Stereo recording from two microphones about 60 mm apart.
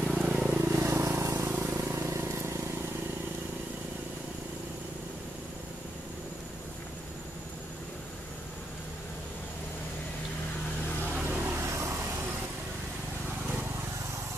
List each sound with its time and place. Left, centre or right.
0.1 s vehicle: centre
0.7 s vehicle: right
11.2 s vehicle: right